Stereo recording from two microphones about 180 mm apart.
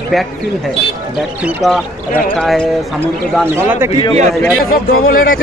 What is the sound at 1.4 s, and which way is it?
Speech, centre (ahead or behind).